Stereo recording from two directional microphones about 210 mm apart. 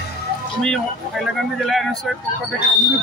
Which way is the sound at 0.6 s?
Centre (ahead or behind).